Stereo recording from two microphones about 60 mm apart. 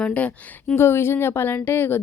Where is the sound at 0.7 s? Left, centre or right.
Left.